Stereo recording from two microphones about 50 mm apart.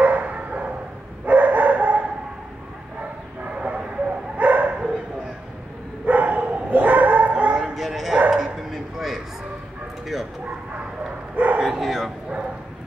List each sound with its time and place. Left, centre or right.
0.0 s dog: right
3.4 s a sound: right
4.4 s dog: right
6.0 s dog: right
7.5 s bow-wow: centre
11.3 s dog: right
11.6 s bow-wow: centre